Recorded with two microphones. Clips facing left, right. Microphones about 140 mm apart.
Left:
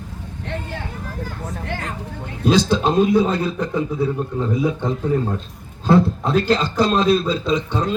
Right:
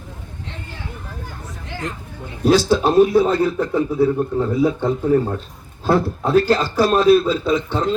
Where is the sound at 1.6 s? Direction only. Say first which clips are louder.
Right 2 dB; 60° left (ahead or behind).